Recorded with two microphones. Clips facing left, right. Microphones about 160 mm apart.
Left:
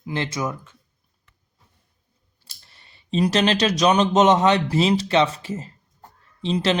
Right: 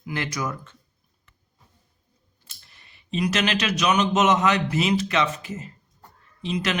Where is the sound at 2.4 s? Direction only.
35° left (ahead or behind).